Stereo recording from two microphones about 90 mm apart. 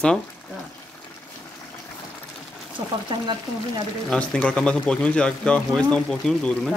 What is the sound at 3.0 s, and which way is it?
Speech, 55° right (ahead or behind).